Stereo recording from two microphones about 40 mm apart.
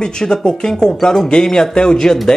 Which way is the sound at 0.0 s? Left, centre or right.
Centre.